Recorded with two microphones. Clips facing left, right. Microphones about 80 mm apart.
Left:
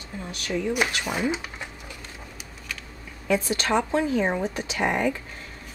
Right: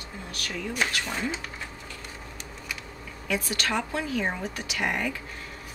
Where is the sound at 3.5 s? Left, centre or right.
Left.